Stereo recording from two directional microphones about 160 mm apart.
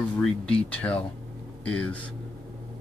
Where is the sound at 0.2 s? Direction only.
5° left (ahead or behind).